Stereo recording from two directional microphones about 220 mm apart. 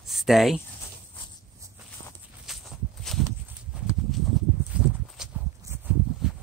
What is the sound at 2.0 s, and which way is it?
Walk, 50° right (ahead or behind).